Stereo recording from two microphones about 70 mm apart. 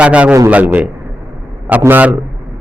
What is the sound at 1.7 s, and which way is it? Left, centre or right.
Speech, right.